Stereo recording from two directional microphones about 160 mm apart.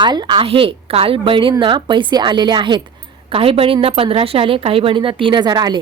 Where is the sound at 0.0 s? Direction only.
30° right (ahead or behind).